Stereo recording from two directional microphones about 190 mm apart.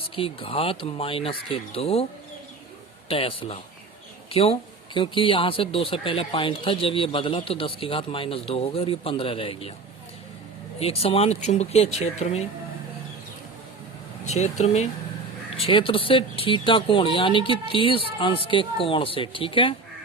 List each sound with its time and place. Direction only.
0.2 s speech: 30° left (ahead or behind)
3.1 s speech: 30° left (ahead or behind)
10.8 s speech: 30° left (ahead or behind)
14.3 s speech: 35° left (ahead or behind)